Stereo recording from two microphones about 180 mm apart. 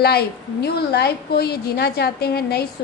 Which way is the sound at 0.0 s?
60° left (ahead or behind).